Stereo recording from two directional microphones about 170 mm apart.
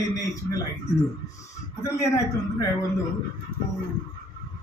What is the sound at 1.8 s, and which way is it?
Speech, 20° left (ahead or behind).